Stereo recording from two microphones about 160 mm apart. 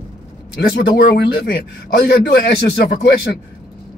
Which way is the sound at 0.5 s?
80° left.